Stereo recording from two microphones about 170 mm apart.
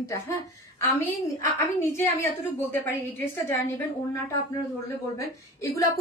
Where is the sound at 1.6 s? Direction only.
15° left (ahead or behind).